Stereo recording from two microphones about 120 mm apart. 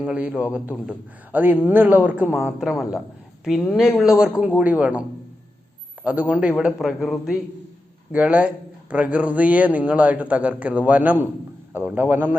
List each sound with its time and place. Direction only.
0.0 s a man's voice: 10° right (ahead or behind)
2.6 s a man's voice: centre (ahead or behind); by 12.4 s 15° right (ahead or behind)